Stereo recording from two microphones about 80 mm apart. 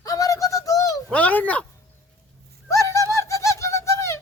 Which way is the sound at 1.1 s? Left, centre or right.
Centre.